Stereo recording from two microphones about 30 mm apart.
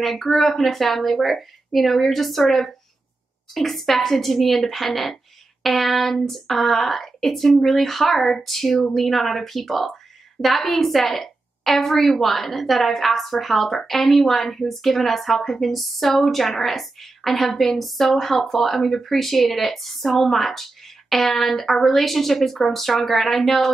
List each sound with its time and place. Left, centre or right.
0.0 s a woman's voice: centre